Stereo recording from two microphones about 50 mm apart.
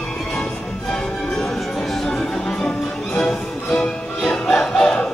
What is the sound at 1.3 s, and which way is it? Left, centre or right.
Music, centre.